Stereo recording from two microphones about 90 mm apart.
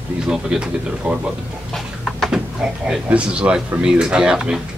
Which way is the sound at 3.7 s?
10° right (ahead or behind).